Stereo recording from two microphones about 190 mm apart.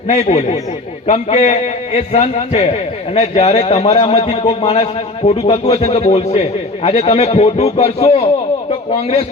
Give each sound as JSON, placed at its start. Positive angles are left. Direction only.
{"t": 0.1, "sound": "a man's voice", "side_deg": 35}